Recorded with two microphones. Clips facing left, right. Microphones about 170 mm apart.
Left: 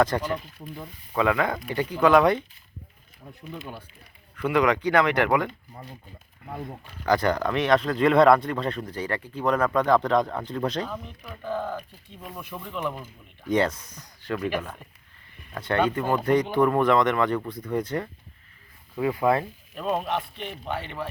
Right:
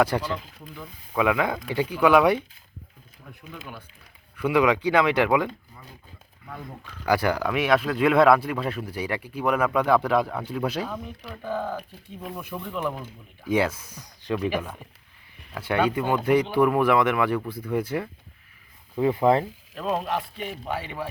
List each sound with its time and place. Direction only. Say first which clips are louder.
0.0 s speech: even; 10° right (ahead or behind)
3.5 s speech: left 3 dB; 30° left (ahead or behind)
4.4 s speech: right 1 dB; 10° right (ahead or behind)
5.7 s speech: left 6 dB; 50° left (ahead or behind)
6.5 s speech: left 3 dB; 35° left (ahead or behind)
7.0 s speech: even; 10° right (ahead or behind)
18.9 s speech: right 3 dB; 25° right (ahead or behind)
19.7 s a man's voice: even; centre (ahead or behind)